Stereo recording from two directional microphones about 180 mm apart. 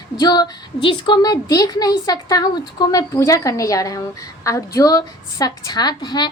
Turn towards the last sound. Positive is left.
turn(degrees=25)  # may be behind; listen again after turning